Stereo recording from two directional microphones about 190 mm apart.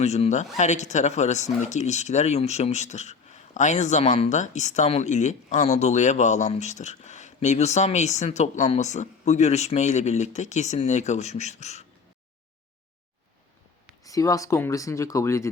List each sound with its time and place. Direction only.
0.0 s speech: 35° left (ahead or behind)
14.0 s speech: 20° left (ahead or behind)